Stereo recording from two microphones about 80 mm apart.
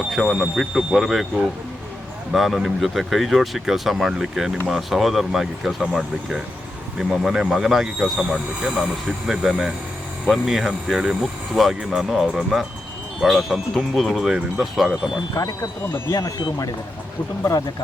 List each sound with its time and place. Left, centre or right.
0.1 s speech: centre
15.4 s speech: left